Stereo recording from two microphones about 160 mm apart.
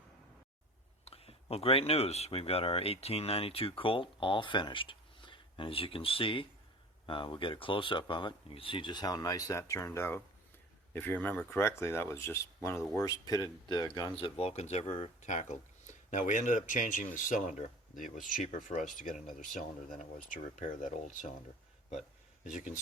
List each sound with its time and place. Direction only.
1.0 s speech: 35° left (ahead or behind); by 21.2 s 55° left (ahead or behind)